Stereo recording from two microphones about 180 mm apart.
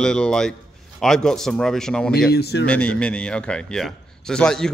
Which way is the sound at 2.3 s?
65° left (ahead or behind).